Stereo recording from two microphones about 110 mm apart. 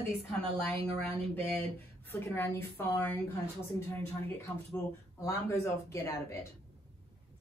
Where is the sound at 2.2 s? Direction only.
20° left (ahead or behind).